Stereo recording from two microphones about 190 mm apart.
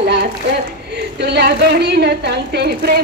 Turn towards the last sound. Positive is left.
turn(degrees=-55)  # may be behind; listen again after turning